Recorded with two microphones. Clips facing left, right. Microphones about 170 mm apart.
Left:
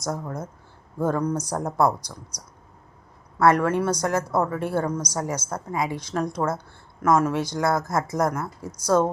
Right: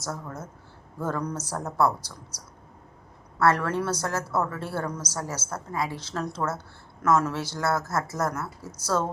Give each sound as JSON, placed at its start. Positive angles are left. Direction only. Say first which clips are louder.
{"t": 0.0, "sound": "a woman's voice", "louder": "left 5 dB", "side_deg": 15}